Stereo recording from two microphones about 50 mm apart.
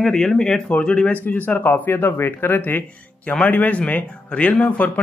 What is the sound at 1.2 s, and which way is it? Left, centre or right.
Speech, left.